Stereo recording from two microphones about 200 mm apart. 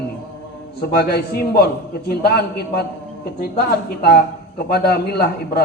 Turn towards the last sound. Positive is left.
turn(degrees=50)  # may be behind; listen again after turning